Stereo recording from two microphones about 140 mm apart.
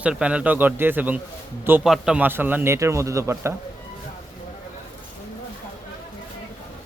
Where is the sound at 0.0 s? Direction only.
10° right (ahead or behind).